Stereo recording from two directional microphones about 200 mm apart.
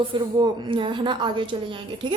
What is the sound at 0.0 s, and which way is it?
A woman's voice, 25° right (ahead or behind).